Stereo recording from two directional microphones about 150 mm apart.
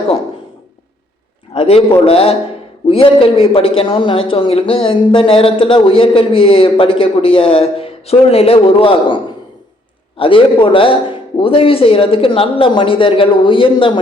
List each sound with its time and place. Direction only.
1.5 s a man's voice: 40° left (ahead or behind)